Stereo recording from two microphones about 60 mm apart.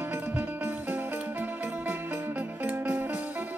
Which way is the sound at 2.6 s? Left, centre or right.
Right.